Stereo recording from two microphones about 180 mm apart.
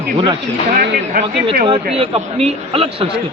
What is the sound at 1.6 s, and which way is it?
Speech, 30° right (ahead or behind).